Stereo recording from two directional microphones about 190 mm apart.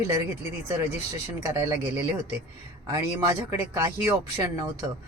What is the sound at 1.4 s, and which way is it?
Speech, 10° right (ahead or behind).